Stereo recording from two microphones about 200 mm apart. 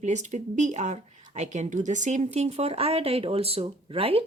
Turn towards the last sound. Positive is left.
turn(degrees=-25)  # may be behind; listen again after turning